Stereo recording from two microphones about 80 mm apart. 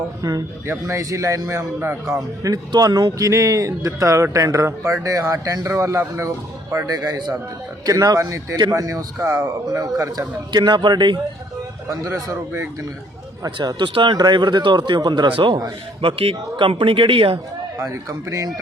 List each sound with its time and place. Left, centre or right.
0.2 s a man's voice: right
2.1 s a man's voice: right
6.9 s a man's voice: right
7.9 s speech: right
9.1 s a man's voice: right
10.5 s speech: right
11.9 s speech: right
13.6 s speech: right
16.0 s a man's voice: right
17.3 s a man's voice: right
18.1 s speech: right